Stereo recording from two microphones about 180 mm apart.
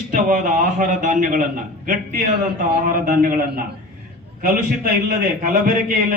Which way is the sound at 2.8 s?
50° right (ahead or behind).